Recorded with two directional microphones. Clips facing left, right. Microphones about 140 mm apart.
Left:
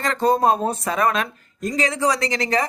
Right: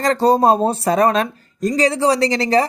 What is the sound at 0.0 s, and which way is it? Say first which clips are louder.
A woman's voice: right 4 dB; 35° right (ahead or behind).